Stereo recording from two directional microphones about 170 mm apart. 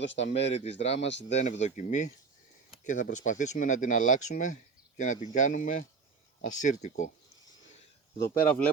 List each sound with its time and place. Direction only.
0.2 s speech: 40° left (ahead or behind)
8.4 s speech: 10° left (ahead or behind)